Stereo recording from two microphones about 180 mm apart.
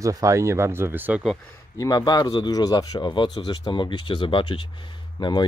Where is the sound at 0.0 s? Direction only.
20° right (ahead or behind).